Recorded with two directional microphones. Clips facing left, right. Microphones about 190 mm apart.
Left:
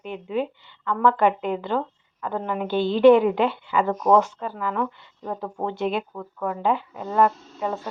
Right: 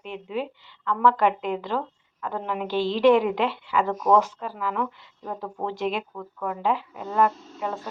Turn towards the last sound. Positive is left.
turn(degrees=0)  # may be behind; listen again after turning